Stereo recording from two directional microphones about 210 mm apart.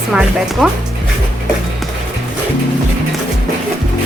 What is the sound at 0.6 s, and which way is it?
Speech, centre (ahead or behind).